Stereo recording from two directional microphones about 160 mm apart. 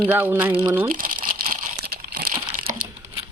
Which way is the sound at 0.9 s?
65° right (ahead or behind).